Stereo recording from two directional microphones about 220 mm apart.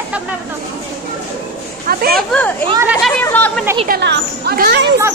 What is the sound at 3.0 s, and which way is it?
Speech, 5° left (ahead or behind).